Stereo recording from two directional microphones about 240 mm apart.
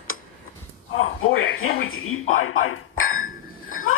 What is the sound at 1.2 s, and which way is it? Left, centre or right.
Speech, left.